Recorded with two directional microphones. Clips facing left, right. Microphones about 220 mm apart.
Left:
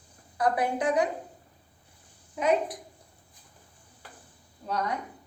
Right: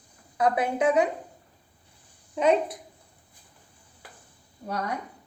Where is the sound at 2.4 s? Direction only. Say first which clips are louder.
Right 3 dB; 30° right (ahead or behind).